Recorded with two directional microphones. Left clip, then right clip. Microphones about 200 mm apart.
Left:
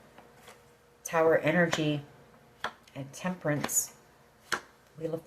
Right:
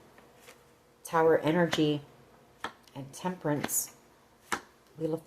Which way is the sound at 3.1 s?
45° right (ahead or behind).